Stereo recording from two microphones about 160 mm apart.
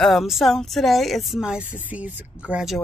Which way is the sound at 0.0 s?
Centre (ahead or behind).